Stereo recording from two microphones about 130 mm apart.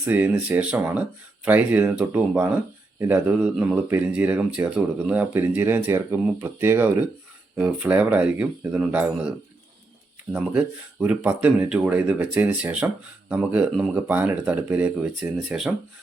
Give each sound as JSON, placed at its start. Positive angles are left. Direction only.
{"t": 0.0, "sound": "speech", "side_deg": -15}
{"t": 11.0, "sound": "speech", "side_deg": -10}